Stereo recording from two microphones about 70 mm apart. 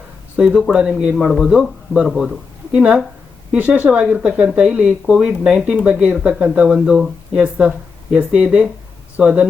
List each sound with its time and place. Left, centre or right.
0.3 s speech: centre
2.7 s speech: centre